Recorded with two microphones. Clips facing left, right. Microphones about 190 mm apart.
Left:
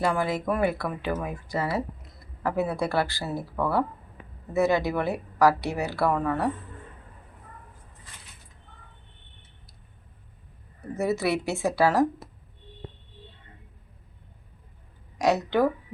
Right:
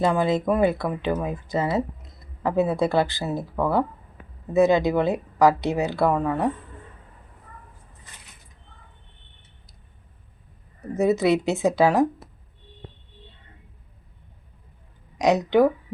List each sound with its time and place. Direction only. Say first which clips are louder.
0.0 s speech: right 5 dB; 20° right (ahead or behind)
10.9 s speech: right 6 dB; 20° right (ahead or behind)
15.2 s speech: right 4 dB; 15° right (ahead or behind)